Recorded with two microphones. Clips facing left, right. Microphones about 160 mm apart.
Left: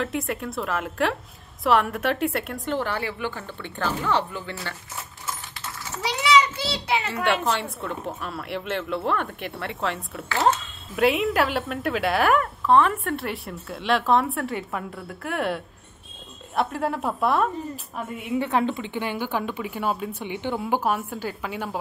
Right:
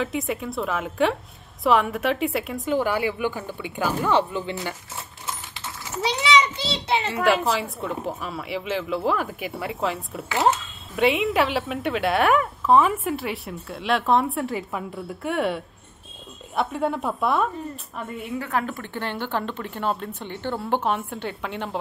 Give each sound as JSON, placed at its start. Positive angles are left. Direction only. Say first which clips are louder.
{"t": 0.0, "sound": "a woman's voice", "louder": "right 1 dB", "side_deg": 0}
{"t": 5.9, "sound": "a child's voice", "louder": "right 1 dB", "side_deg": -20}
{"t": 7.1, "sound": "a woman's voice", "louder": "right 4 dB", "side_deg": 0}
{"t": 18.4, "sound": "a woman's voice", "louder": "left 4 dB", "side_deg": 25}
{"t": 18.9, "sound": "speech", "louder": "right 3 dB", "side_deg": 10}